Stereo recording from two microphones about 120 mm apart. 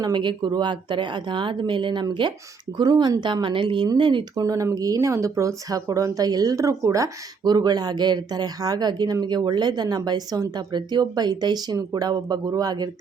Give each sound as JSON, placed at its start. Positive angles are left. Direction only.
{"t": 0.0, "sound": "speech", "side_deg": -40}
{"t": 4.4, "sound": "speech", "side_deg": -30}